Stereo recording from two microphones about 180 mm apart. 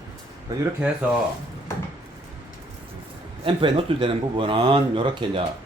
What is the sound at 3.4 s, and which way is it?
Speech, 30° right (ahead or behind).